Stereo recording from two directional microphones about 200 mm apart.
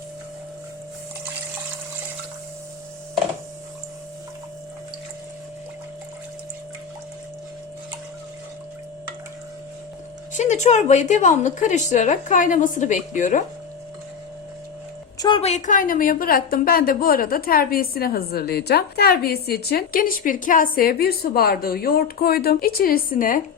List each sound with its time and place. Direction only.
10.3 s a woman's voice: 35° left (ahead or behind)
15.2 s a woman's voice: 25° left (ahead or behind); by 23.4 s 45° left (ahead or behind)